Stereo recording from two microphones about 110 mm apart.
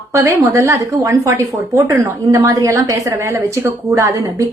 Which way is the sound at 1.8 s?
30° right (ahead or behind).